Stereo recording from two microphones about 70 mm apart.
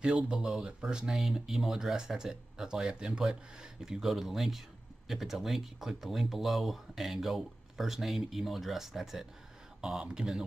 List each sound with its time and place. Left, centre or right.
0.0 s speech: centre